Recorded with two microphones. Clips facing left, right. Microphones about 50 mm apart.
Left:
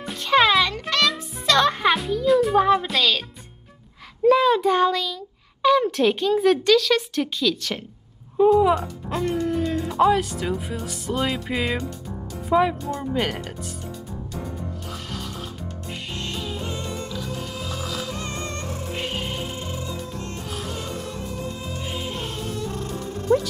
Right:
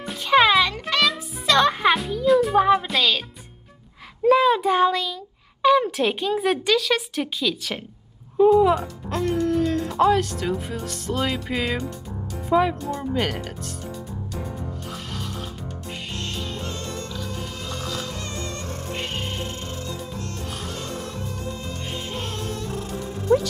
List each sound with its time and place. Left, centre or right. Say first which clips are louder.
0.0 s music: right 1 dB; centre
4.2 s a child's voice: even; centre
16.2 s music: left 2 dB; centre
17.1 s music: left 1 dB; centre
18.2 s music: left 1 dB; left
18.9 s music: left 1 dB; centre
22.1 s music: even; centre